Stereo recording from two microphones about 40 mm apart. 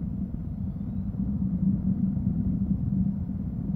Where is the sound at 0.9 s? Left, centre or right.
Left.